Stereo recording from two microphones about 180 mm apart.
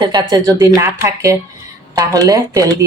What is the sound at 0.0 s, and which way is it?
Speech, 25° right (ahead or behind).